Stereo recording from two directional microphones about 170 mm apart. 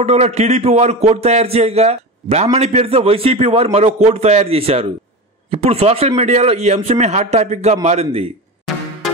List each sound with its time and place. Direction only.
0.0 s speech: 40° right (ahead or behind)